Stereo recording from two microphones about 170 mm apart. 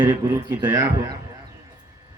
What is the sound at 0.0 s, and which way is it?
Speech, 10° right (ahead or behind).